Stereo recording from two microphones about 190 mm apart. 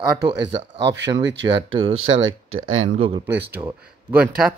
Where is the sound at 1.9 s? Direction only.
90° right.